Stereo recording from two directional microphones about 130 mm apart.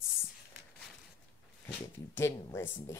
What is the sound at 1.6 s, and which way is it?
Speech, 15° left (ahead or behind).